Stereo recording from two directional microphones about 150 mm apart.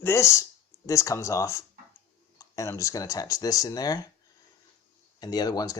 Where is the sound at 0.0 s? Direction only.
20° left (ahead or behind).